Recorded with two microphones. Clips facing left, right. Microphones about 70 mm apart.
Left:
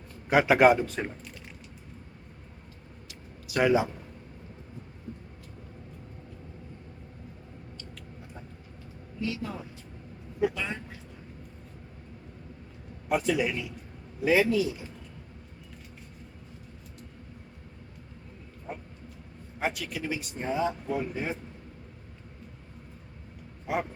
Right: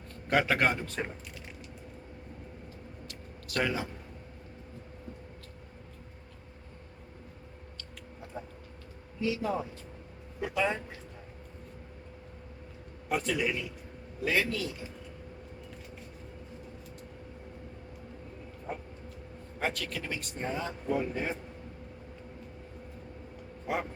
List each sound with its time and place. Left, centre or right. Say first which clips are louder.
0.3 s speech: left 7 dB; centre
3.1 s a sound: left 3 dB; centre
9.2 s speech: right 3 dB; centre
13.1 s speech: left 4 dB; centre
19.5 s speech: left 2 dB; centre